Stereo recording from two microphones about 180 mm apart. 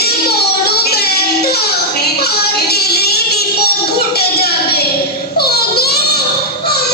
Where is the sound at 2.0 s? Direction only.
60° left (ahead or behind).